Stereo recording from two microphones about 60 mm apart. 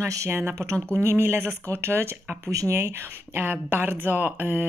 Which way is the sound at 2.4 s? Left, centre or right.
Right.